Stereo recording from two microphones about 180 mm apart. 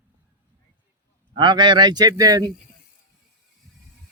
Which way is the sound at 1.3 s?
25° right (ahead or behind).